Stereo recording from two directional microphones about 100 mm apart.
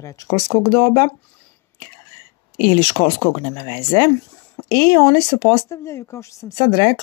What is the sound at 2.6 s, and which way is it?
Speech, 50° left (ahead or behind).